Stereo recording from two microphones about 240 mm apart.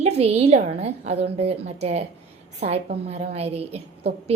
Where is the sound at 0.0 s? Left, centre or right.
Right.